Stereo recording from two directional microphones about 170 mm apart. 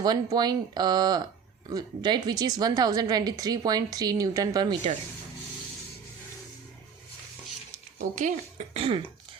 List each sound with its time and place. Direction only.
0.0 s speech: 25° right (ahead or behind)
8.1 s speech: 45° right (ahead or behind)